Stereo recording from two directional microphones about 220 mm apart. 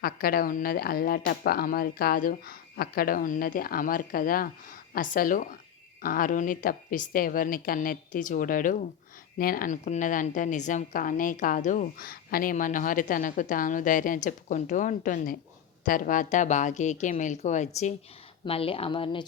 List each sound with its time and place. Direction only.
0.0 s a woman's voice: 40° left (ahead or behind); by 19.2 s 25° left (ahead or behind)